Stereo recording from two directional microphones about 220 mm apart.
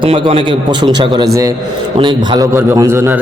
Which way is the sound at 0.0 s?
25° right (ahead or behind).